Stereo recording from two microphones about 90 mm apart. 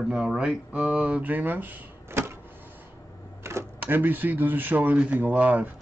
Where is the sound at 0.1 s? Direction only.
10° right (ahead or behind); by 2.3 s 25° right (ahead or behind).